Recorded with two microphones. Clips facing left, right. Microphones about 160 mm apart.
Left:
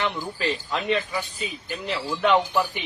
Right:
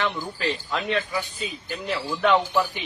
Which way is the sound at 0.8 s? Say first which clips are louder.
Left 2 dB; centre (ahead or behind).